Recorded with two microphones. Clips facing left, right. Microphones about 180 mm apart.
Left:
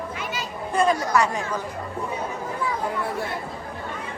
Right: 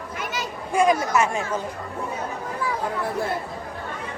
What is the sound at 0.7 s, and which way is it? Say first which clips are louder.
Speech: right 1 dB; 15° right (ahead or behind).